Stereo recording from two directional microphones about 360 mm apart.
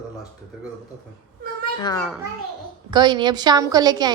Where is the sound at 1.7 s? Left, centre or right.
Centre.